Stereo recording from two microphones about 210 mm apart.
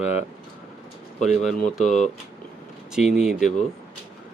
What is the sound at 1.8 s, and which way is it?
Speech, 35° left (ahead or behind).